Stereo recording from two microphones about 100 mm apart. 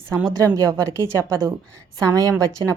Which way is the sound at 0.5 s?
35° right (ahead or behind).